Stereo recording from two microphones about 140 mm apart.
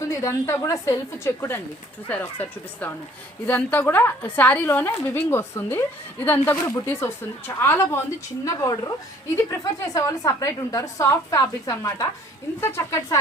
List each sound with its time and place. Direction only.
0.1 s a woman's voice: 20° left (ahead or behind)